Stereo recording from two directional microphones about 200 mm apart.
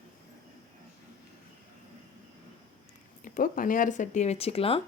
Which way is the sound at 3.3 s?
45° left (ahead or behind).